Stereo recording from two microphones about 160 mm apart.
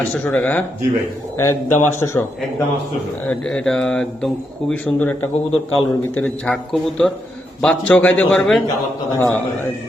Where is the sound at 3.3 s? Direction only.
5° left (ahead or behind).